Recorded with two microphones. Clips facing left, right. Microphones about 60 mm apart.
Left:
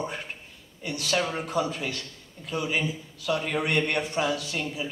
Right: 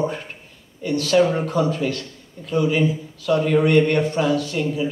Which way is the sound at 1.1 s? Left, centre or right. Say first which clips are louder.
Right 10 dB; centre.